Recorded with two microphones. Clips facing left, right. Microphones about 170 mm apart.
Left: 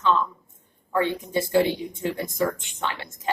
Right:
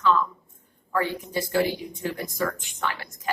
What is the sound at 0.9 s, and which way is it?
A woman's voice, 25° left (ahead or behind).